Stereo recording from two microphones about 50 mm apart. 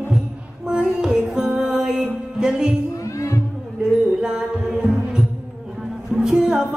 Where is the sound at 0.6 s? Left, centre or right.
Centre.